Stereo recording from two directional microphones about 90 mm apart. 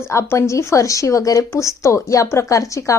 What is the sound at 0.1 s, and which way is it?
A woman's voice, 30° left (ahead or behind).